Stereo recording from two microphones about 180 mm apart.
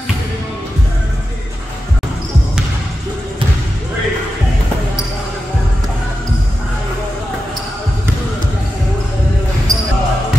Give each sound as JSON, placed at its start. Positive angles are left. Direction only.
{"t": 9.7, "sound": "basketball bounce", "side_deg": -20}